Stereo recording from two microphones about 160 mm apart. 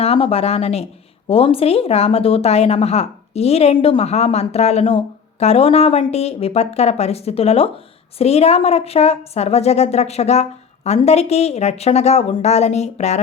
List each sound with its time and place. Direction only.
0.0 s speech: 35° left (ahead or behind)